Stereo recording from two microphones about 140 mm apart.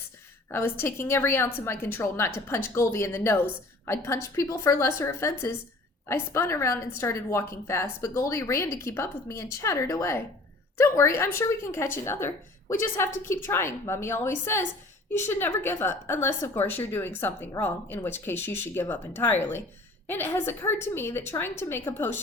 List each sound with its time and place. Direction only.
0.5 s a woman's voice: 15° left (ahead or behind)